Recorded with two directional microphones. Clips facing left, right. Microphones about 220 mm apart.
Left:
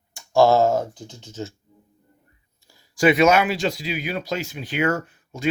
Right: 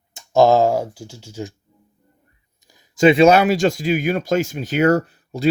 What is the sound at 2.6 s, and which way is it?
Speech, 20° right (ahead or behind).